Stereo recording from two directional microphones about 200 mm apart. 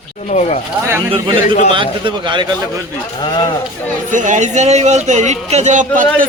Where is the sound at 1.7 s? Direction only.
25° right (ahead or behind).